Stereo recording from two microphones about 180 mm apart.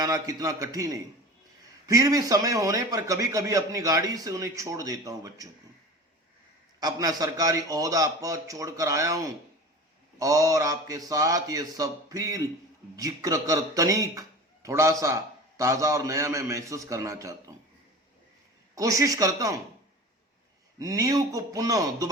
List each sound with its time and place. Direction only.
0.0 s a man's voice: 20° right (ahead or behind)
6.7 s a man's voice: 20° right (ahead or behind)
18.7 s a man's voice: 20° right (ahead or behind)
20.7 s a man's voice: 20° right (ahead or behind)